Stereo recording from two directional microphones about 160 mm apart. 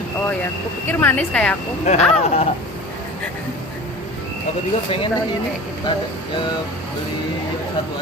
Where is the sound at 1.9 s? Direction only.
45° left (ahead or behind).